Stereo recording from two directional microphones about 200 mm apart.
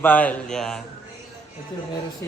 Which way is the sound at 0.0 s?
10° left (ahead or behind).